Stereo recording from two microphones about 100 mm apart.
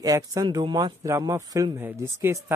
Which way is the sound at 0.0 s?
35° right (ahead or behind).